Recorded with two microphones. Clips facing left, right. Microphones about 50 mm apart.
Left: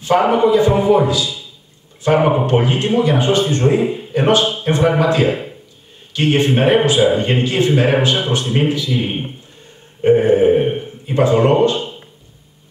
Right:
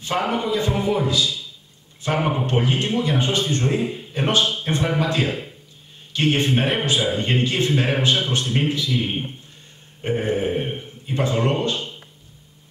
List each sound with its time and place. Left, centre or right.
0.0 s a man's voice: left
8.9 s a man's voice: left